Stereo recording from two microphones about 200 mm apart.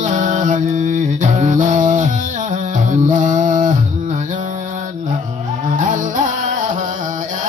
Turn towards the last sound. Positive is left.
turn(degrees=-40)  # may be behind; listen again after turning